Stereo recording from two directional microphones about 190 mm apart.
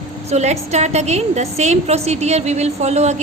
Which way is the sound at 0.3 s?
35° right (ahead or behind).